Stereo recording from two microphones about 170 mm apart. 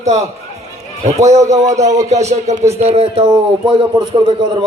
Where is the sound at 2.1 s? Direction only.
40° right (ahead or behind); by 4.5 s 25° right (ahead or behind).